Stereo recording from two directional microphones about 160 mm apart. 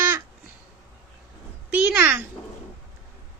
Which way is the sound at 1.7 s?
5° right (ahead or behind).